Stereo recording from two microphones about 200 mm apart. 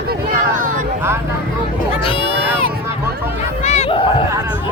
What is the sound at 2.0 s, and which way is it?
Speech, 25° left (ahead or behind).